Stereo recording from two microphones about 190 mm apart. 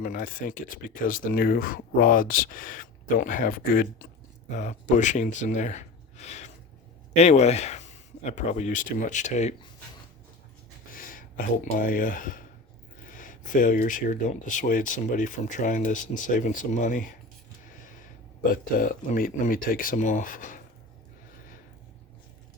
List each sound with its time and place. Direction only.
0.0 s speech: 45° left (ahead or behind)
4.5 s speech: 40° left (ahead or behind)
10.9 s speech: 45° left (ahead or behind)
18.5 s speech: 45° left (ahead or behind)